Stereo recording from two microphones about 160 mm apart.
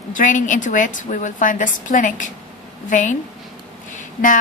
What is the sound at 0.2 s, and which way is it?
A woman's voice, 50° left (ahead or behind).